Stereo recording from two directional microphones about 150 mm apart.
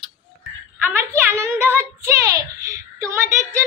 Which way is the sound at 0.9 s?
15° right (ahead or behind).